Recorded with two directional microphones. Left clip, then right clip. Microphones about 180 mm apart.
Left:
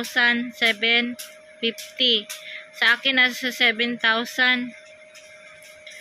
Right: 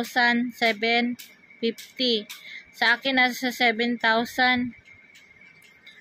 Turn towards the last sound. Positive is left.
turn(degrees=-25)  # may be behind; listen again after turning